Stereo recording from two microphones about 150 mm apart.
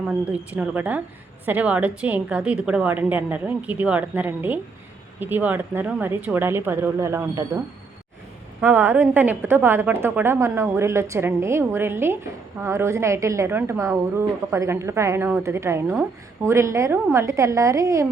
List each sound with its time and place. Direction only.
0.1 s a woman's voice: 10° right (ahead or behind)
8.6 s a woman's voice: 15° right (ahead or behind)